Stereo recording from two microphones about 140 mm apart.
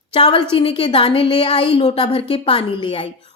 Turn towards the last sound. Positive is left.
turn(degrees=40)  # may be behind; listen again after turning